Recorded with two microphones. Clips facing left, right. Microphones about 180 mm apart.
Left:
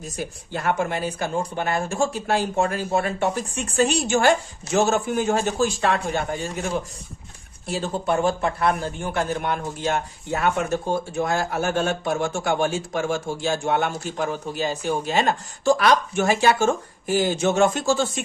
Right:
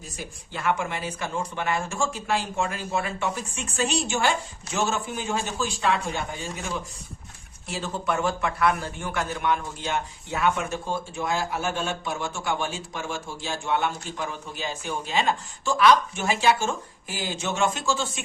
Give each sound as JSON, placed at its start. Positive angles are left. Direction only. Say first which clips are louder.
{"t": 0.5, "sound": "speech", "louder": "left 3 dB", "side_deg": 40}
{"t": 7.7, "sound": "speech", "louder": "left 5 dB", "side_deg": 30}